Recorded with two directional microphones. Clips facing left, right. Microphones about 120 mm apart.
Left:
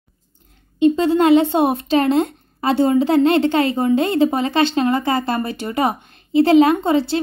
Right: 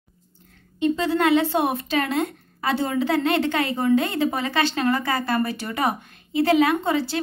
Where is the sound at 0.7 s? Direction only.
25° left (ahead or behind).